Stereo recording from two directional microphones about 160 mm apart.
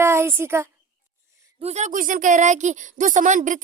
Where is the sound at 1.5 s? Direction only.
45° right (ahead or behind).